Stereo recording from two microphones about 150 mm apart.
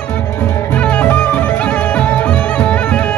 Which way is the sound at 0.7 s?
10° left (ahead or behind).